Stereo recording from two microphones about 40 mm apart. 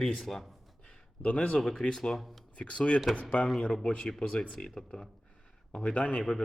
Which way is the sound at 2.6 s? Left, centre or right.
Left.